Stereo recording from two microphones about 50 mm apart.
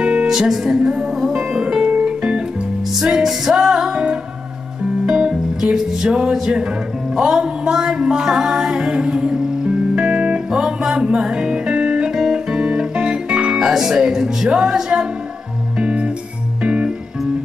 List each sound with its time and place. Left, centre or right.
0.0 s music: centre
0.3 s music: centre
3.0 s music: centre
5.0 s music: centre
10.5 s music: centre
15.8 s music: right